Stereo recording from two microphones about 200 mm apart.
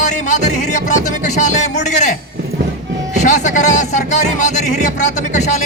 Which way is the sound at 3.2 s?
40° left (ahead or behind).